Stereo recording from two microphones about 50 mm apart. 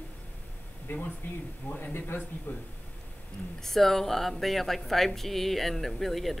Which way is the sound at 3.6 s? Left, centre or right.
Centre.